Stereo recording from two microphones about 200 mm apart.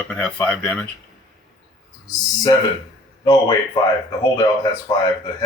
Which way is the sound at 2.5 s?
20° left (ahead or behind).